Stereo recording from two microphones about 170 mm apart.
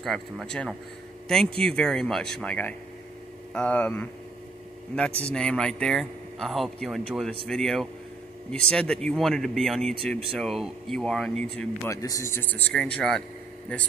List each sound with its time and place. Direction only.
0.0 s a man's voice: centre (ahead or behind)
11.9 s speech: 20° left (ahead or behind)